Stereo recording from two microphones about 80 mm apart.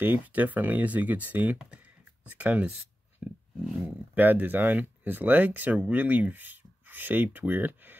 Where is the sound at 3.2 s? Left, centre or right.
Centre.